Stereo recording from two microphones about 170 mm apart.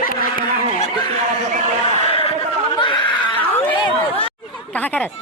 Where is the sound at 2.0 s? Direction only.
35° left (ahead or behind).